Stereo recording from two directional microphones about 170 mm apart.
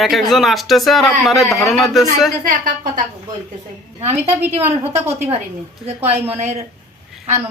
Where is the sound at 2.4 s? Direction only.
55° right (ahead or behind).